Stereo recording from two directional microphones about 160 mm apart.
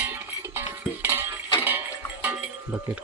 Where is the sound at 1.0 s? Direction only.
10° right (ahead or behind).